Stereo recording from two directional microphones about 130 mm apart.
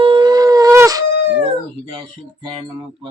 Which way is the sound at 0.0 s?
40° right (ahead or behind).